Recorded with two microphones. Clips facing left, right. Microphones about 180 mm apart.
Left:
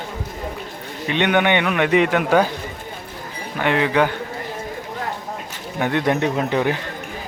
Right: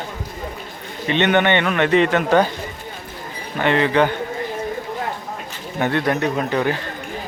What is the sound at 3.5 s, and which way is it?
Speech, 10° left (ahead or behind).